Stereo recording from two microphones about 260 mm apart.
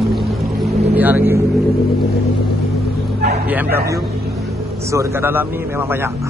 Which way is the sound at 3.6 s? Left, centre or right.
Right.